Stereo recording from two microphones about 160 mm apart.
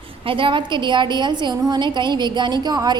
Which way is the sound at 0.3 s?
30° right (ahead or behind).